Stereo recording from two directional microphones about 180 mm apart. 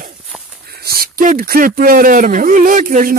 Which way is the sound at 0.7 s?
55° right (ahead or behind).